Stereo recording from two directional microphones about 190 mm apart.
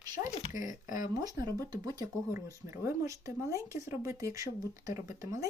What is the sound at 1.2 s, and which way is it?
Speech, 20° right (ahead or behind).